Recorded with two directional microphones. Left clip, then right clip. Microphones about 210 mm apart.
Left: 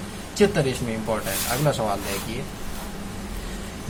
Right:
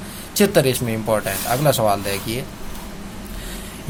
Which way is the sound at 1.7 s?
50° right (ahead or behind).